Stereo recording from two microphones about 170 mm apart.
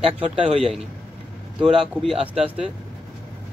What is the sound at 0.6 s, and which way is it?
A man's voice, centre (ahead or behind).